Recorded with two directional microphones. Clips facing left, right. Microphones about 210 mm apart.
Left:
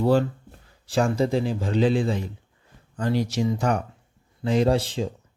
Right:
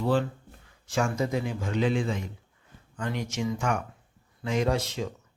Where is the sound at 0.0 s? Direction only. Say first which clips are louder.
Left 5 dB; 40° left (ahead or behind).